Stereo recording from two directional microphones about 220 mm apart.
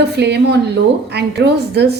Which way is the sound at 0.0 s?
50° right (ahead or behind).